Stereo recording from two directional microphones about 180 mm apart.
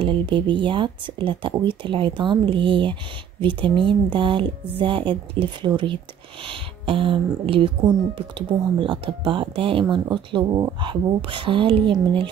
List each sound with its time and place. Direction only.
0.0 s speech: 25° right (ahead or behind)